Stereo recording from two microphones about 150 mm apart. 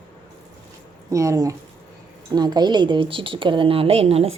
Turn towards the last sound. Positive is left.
turn(degrees=-40)  # may be behind; listen again after turning